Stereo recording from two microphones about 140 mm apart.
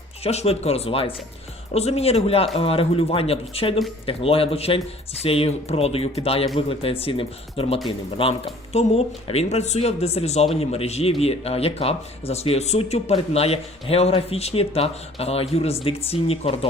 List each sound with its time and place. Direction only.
0.2 s speech: 50° left (ahead or behind)